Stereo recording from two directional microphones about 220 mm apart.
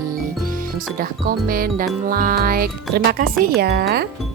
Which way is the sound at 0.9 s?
40° right (ahead or behind).